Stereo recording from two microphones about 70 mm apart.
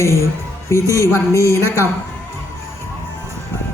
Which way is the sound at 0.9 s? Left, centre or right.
Left.